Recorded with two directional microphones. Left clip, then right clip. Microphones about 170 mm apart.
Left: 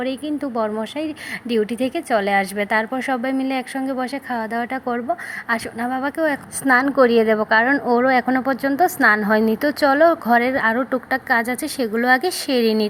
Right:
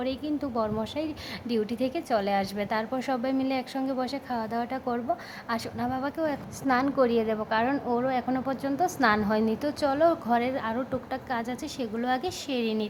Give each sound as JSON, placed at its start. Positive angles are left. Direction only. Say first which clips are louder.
{"t": 0.0, "sound": "speech", "louder": "left 6 dB", "side_deg": 10}